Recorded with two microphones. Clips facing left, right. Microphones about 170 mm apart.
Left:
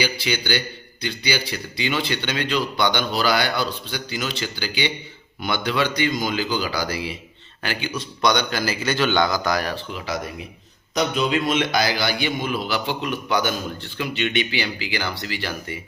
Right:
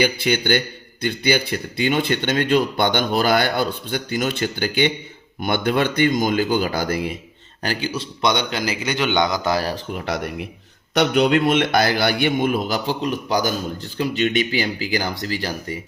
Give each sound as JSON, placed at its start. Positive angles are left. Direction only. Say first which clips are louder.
{"t": 0.0, "sound": "a man's voice", "louder": "right 5 dB", "side_deg": -50}
{"t": 7.6, "sound": "a man's voice", "louder": "right 3 dB", "side_deg": -35}
{"t": 9.9, "sound": "a man's voice", "louder": "right 3 dB", "side_deg": -60}